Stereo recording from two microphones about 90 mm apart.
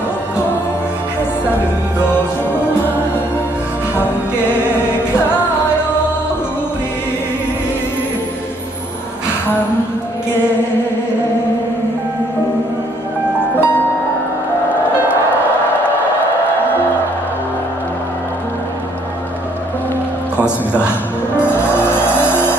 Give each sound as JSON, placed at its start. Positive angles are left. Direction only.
{"t": 13.6, "sound": "music", "side_deg": 20}
{"t": 21.4, "sound": "vehicle", "side_deg": 25}